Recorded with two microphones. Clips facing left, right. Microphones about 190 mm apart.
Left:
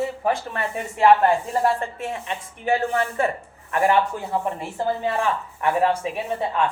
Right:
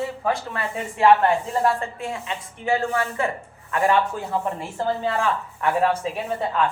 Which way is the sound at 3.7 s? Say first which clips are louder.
Left 1 dB; 20° left (ahead or behind).